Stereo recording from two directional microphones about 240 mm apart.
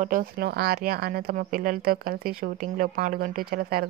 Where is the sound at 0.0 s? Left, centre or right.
Right.